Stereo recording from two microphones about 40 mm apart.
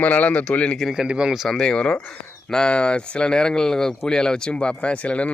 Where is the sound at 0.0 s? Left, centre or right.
Left.